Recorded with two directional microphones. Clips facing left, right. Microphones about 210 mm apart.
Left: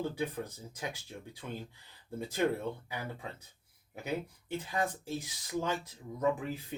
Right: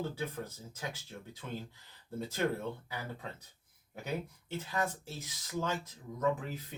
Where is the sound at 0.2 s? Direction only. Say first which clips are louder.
Left 3 dB; 15° left (ahead or behind).